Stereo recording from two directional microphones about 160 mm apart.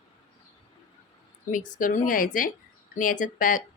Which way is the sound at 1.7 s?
55° left (ahead or behind).